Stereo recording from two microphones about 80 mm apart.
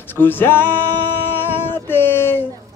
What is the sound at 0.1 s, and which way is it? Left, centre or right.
Music, left.